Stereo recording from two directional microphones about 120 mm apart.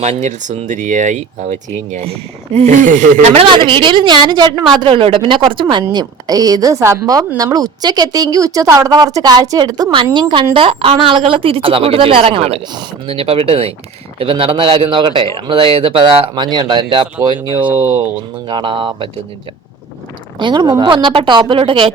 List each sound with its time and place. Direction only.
0.0 s speech: 70° right (ahead or behind)
3.5 s a woman's voice: 45° right (ahead or behind)
5.9 s a woman's voice: 35° right (ahead or behind)
18.4 s a woman's voice: 40° right (ahead or behind)
20.4 s a woman's voice: 40° right (ahead or behind)